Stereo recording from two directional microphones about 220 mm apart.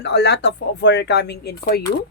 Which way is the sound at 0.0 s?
50° left (ahead or behind).